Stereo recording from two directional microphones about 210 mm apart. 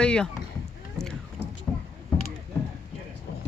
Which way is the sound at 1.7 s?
5° left (ahead or behind).